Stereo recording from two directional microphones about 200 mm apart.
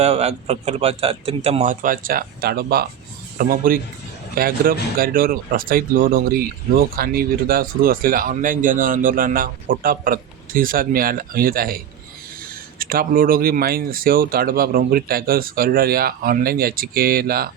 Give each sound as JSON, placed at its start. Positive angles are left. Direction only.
{"t": 0.0, "sound": "speech", "side_deg": -30}
{"t": 12.8, "sound": "speech", "side_deg": -45}